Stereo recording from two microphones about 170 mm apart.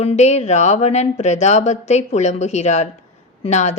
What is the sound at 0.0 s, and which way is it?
A woman's voice, 40° left (ahead or behind).